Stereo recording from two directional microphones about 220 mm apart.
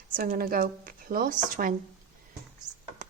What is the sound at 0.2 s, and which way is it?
Speech, 40° right (ahead or behind).